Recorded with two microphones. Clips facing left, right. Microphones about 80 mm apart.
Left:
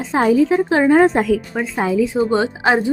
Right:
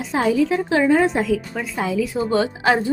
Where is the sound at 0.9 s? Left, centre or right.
Left.